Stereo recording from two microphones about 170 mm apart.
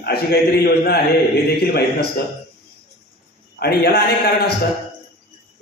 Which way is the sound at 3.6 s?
65° left (ahead or behind).